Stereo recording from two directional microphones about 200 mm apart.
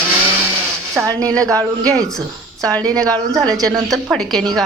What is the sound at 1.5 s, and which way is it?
Speech, 15° right (ahead or behind).